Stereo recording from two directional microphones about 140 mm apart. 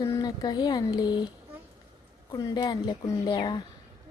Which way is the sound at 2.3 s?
30° left (ahead or behind).